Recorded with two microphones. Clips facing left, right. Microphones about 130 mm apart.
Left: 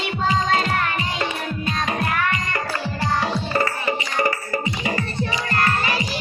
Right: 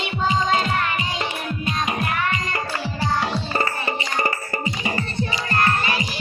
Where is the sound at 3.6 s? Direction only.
30° right (ahead or behind).